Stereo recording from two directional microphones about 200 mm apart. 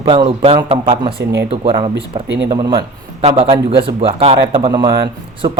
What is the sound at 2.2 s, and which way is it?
Speech, 60° right (ahead or behind).